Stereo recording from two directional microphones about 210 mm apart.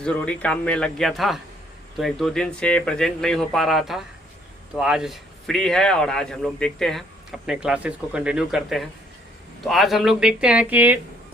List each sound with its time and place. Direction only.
0.0 s speech: 5° left (ahead or behind)